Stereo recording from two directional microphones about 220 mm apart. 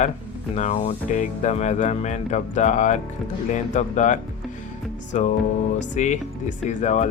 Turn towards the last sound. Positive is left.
turn(degrees=30)  # may be behind; listen again after turning